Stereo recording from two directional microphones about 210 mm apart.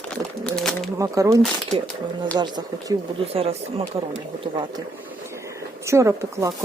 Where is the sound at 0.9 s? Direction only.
15° right (ahead or behind).